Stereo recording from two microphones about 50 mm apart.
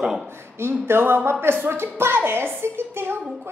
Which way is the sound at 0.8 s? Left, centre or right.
Right.